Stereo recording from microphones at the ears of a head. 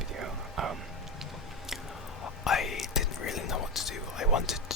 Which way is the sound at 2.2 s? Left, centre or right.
Left.